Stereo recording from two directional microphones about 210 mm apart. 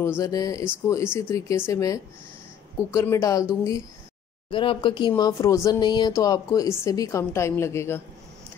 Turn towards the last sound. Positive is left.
turn(degrees=15)  # may be behind; listen again after turning